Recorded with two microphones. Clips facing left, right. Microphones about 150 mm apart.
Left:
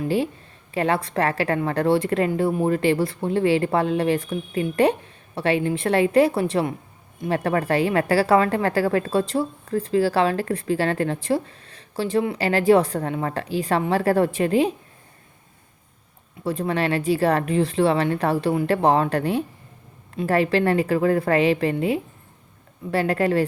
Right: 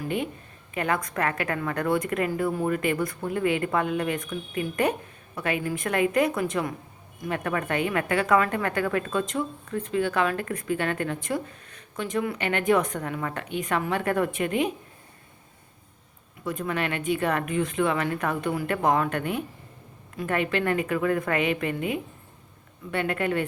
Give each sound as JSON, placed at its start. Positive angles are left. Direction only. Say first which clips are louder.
{"t": 0.0, "sound": "a woman's voice", "louder": "left 6 dB", "side_deg": 30}
{"t": 16.4, "sound": "a woman's voice", "louder": "left 5 dB", "side_deg": 35}